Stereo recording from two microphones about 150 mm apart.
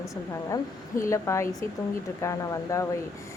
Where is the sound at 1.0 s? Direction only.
20° left (ahead or behind).